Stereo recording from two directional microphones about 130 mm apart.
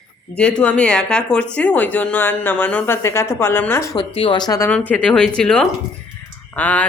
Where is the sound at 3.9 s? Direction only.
40° left (ahead or behind).